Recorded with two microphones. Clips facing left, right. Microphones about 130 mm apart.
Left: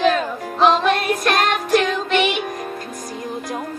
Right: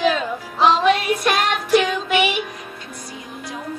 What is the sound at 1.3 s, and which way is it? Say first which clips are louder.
Music: even; 45° left (ahead or behind).